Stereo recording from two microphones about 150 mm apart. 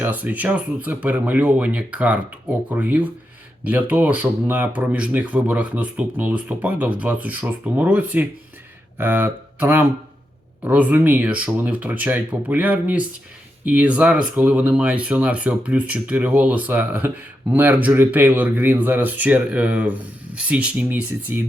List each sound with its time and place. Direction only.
0.0 s speech: 10° right (ahead or behind)